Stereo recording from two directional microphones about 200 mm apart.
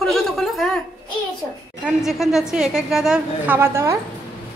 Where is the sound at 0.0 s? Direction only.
Centre (ahead or behind).